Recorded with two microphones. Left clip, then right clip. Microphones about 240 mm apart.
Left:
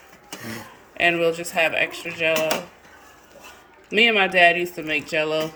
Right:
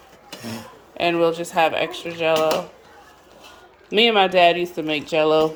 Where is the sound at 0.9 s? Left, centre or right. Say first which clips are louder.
Even; centre.